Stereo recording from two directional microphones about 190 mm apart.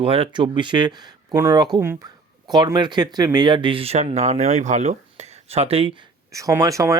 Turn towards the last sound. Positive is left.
turn(degrees=-15)  # may be behind; listen again after turning